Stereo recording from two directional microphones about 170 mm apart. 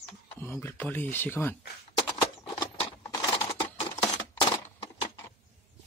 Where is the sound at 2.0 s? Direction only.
25° left (ahead or behind).